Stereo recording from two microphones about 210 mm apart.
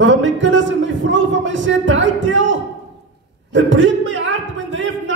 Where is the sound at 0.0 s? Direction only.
60° right (ahead or behind).